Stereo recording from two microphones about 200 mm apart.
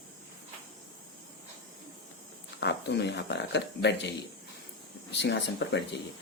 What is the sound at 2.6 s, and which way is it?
Speech, 60° left (ahead or behind).